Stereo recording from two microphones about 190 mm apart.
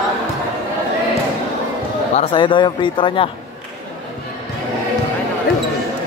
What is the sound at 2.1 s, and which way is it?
Speech, 30° left (ahead or behind).